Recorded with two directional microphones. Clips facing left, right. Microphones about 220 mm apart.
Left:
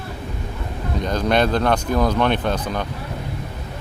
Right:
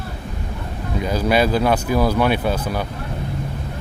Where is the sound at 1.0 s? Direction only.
5° right (ahead or behind).